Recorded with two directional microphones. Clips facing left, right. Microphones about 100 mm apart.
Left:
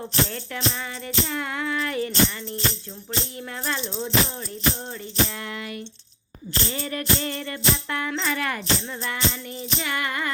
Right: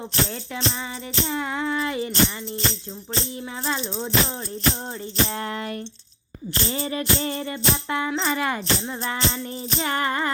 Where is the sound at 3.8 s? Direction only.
25° right (ahead or behind).